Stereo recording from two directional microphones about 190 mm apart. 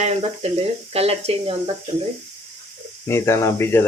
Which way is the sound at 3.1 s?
15° left (ahead or behind).